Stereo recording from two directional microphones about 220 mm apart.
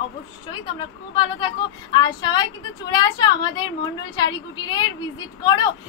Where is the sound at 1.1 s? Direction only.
20° left (ahead or behind).